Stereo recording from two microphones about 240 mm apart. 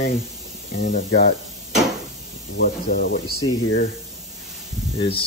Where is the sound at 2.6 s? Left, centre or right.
Left.